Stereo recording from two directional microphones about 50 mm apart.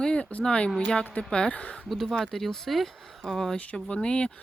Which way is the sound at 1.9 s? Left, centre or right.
Centre.